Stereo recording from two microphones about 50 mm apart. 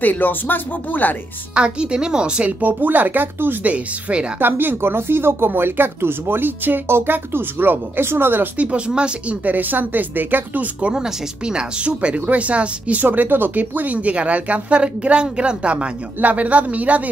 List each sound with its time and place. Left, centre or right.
0.0 s speech: left
1.5 s a woman's voice: centre
2.6 s speech: right
3.6 s speech: right
4.4 s speech: right
8.5 s speech: right
9.4 s speech: right
10.8 s speech: right